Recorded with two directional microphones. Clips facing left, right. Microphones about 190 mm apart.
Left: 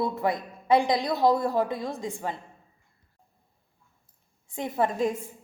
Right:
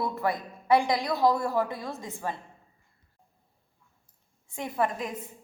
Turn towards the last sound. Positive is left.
turn(degrees=25)  # may be behind; listen again after turning